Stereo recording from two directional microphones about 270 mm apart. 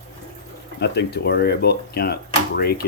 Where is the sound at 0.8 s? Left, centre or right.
Left.